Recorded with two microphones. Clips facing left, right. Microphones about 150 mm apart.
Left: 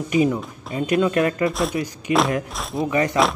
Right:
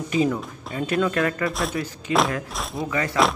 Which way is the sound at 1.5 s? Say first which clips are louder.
Left 3 dB; centre (ahead or behind).